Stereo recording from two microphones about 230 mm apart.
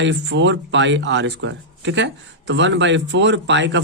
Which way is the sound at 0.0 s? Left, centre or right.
Right.